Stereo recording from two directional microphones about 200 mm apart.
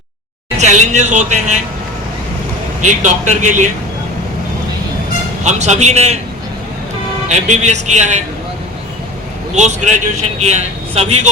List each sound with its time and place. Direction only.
0.5 s a man's voice: 35° right (ahead or behind)
2.8 s a man's voice: 35° right (ahead or behind)
5.4 s a man's voice: 35° right (ahead or behind)
7.3 s a man's voice: 35° right (ahead or behind)
9.6 s a man's voice: 35° right (ahead or behind)